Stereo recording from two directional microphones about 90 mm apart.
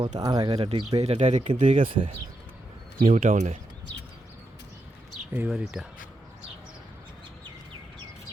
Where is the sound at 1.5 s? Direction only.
70° right (ahead or behind).